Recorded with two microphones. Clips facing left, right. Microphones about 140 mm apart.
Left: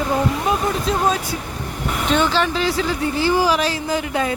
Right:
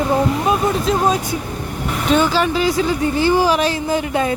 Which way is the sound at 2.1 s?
10° right (ahead or behind).